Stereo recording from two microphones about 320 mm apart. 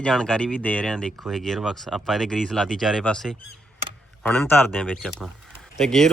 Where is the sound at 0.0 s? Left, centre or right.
Centre.